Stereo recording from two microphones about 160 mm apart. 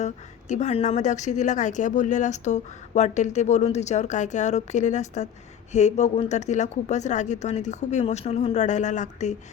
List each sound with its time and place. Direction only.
0.0 s a woman's voice: 45° left (ahead or behind)